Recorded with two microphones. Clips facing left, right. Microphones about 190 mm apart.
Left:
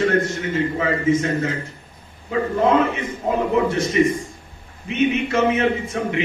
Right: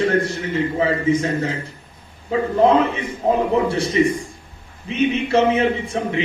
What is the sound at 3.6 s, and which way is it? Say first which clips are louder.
A man's voice: even; 30° right (ahead or behind).